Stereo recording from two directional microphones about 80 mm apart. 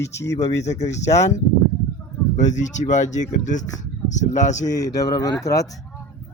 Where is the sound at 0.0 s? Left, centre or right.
Left.